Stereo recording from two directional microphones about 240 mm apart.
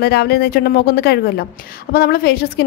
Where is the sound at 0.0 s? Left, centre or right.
Left.